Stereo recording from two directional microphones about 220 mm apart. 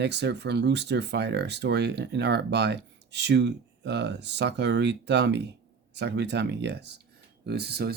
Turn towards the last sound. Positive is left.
turn(degrees=-45)  # may be behind; listen again after turning